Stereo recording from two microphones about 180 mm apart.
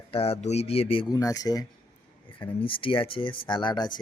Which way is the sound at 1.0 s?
20° left (ahead or behind).